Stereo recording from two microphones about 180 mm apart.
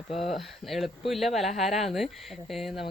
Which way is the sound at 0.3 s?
Centre (ahead or behind).